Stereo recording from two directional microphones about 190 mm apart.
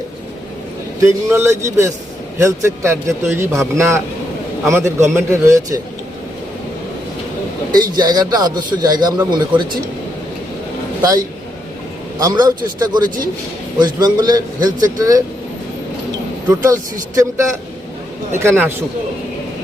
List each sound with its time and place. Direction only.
1.0 s a man's voice: 15° right (ahead or behind)
7.9 s a man's voice: 20° right (ahead or behind)
12.2 s a man's voice: 20° right (ahead or behind)
16.5 s a man's voice: 15° right (ahead or behind)